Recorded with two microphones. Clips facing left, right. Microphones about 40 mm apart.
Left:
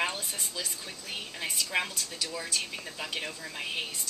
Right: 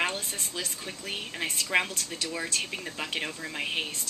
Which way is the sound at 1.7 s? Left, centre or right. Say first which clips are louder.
Right 5 dB; right.